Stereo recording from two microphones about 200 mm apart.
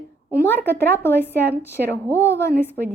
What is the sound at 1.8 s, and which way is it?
Speech, 50° right (ahead or behind).